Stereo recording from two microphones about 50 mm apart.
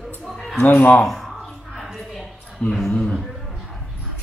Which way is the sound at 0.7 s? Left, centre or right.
Left.